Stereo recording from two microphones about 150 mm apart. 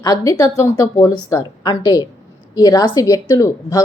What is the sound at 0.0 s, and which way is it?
A woman's voice, 25° left (ahead or behind).